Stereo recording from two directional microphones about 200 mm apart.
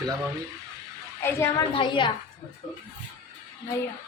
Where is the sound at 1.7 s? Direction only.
25° left (ahead or behind).